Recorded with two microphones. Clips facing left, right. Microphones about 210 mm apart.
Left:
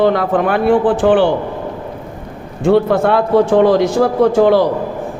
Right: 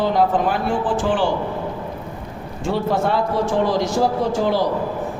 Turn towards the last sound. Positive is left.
turn(degrees=60)  # may be behind; listen again after turning